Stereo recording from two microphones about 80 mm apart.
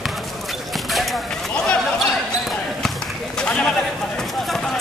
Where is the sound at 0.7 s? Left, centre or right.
Centre.